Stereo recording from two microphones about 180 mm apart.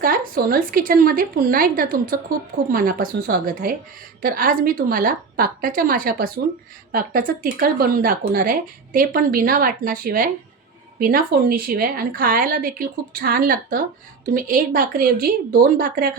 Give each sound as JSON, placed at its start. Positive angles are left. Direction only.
{"t": 0.0, "sound": "speech", "side_deg": -50}